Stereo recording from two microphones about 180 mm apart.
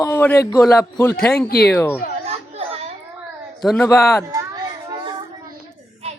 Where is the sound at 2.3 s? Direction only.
35° right (ahead or behind).